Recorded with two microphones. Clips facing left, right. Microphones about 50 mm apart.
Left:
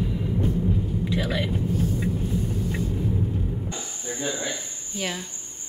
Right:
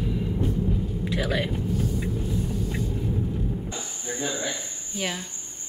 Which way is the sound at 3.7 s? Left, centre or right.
Centre.